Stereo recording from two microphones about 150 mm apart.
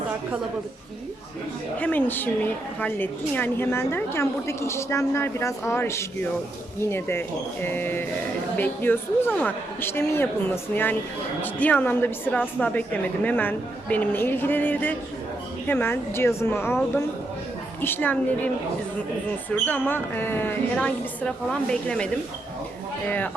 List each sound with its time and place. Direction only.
1.8 s a woman's voice: 10° left (ahead or behind)